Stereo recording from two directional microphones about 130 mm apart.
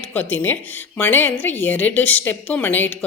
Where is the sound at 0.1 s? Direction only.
15° left (ahead or behind).